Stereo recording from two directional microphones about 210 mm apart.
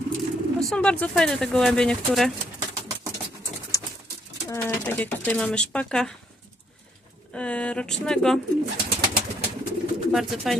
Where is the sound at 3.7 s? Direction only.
15° left (ahead or behind).